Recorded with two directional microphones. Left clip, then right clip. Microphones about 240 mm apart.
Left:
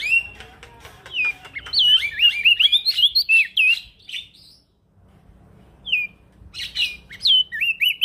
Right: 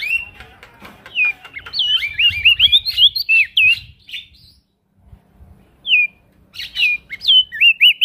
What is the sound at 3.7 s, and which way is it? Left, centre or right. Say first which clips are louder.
Chirp: right 3 dB; right.